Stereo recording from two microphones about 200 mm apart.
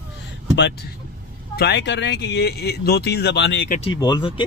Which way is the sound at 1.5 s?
55° left (ahead or behind).